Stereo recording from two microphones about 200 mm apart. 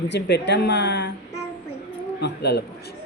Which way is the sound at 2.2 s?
55° left (ahead or behind).